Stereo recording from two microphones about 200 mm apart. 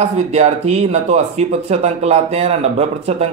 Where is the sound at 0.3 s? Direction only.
35° right (ahead or behind).